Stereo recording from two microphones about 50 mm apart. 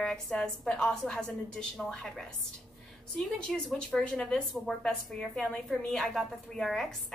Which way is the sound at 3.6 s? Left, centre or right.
Centre.